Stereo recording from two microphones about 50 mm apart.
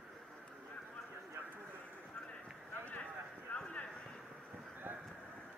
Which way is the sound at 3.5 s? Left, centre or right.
Left.